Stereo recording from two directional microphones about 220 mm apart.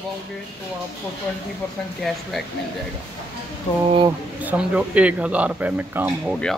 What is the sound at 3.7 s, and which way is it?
Speech, 20° left (ahead or behind).